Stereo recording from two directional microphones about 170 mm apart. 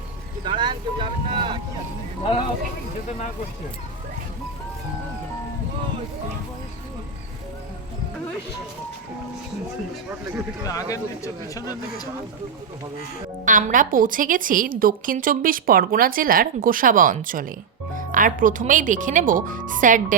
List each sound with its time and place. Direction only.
0.4 s speech: 30° right (ahead or behind)
10.6 s speech: 20° left (ahead or behind)
13.4 s a woman's voice: 50° right (ahead or behind)